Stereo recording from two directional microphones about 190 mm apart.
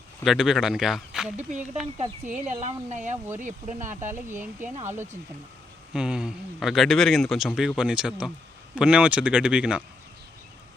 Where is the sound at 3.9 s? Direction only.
10° right (ahead or behind).